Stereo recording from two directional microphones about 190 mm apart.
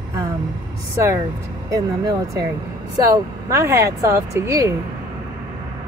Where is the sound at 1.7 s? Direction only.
20° right (ahead or behind).